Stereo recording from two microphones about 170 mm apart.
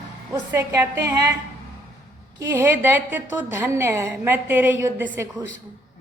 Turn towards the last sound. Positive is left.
turn(degrees=-15)  # may be behind; listen again after turning